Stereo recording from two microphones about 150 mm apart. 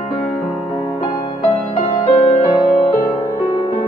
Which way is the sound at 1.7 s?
45° left (ahead or behind).